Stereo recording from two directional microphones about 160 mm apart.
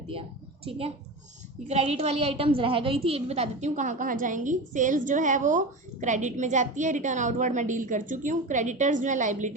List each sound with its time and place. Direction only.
0.1 s a woman's voice: 35° right (ahead or behind)